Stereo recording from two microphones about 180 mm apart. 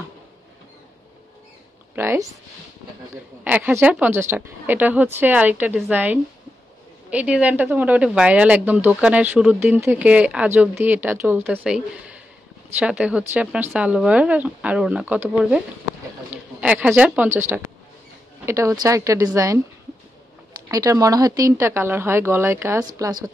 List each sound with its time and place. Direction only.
2.0 s speech: 10° right (ahead or behind)
3.4 s speech: 10° right (ahead or behind)
20.6 s speech: 20° right (ahead or behind)